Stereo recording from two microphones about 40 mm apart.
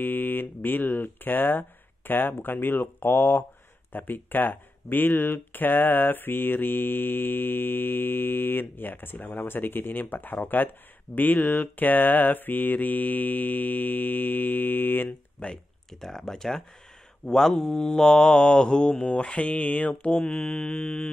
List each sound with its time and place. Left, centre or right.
0.0 s speech: left
11.1 s mantra: left
15.4 s mantra: left
15.9 s speech: centre
17.3 s mantra: centre; by 21.1 s left